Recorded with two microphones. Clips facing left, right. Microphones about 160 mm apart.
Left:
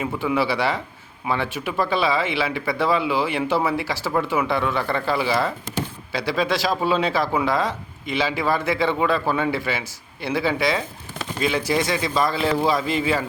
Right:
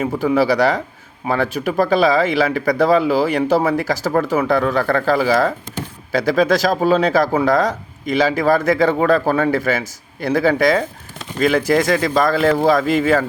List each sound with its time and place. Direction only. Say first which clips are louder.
0.0 s speech: right 6 dB; 40° right (ahead or behind)